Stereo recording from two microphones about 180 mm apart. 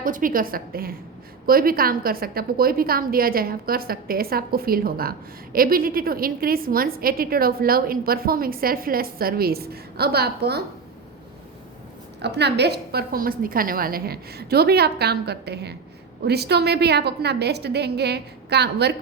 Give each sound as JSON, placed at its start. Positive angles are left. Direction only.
{"t": 0.0, "sound": "a woman's voice", "side_deg": -50}
{"t": 12.2, "sound": "a woman's voice", "side_deg": -65}